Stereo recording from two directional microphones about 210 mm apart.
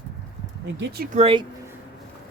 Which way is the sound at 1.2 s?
25° right (ahead or behind).